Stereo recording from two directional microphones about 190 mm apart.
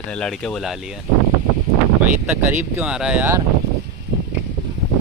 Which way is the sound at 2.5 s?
10° right (ahead or behind).